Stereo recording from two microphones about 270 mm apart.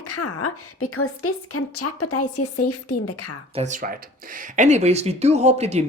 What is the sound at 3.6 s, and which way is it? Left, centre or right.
Speech, right.